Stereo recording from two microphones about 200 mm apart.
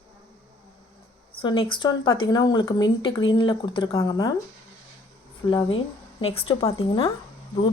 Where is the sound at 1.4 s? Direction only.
25° left (ahead or behind).